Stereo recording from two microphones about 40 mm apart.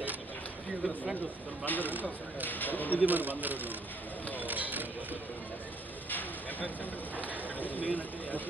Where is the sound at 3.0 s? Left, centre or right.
Right.